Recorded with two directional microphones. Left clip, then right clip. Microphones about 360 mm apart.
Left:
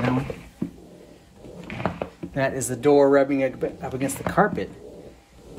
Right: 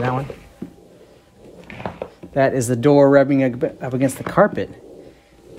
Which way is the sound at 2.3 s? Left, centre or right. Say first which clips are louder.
Right 8 dB; right.